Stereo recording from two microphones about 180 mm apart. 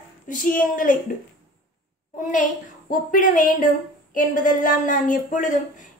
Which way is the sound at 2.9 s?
50° left (ahead or behind).